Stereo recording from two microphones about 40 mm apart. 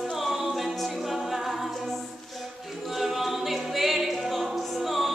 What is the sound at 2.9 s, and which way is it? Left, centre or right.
Music, centre.